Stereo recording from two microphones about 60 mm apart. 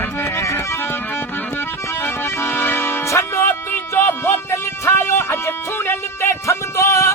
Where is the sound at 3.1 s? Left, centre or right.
Left.